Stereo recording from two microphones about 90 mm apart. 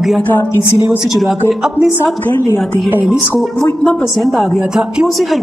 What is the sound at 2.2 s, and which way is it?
Speech, 20° left (ahead or behind).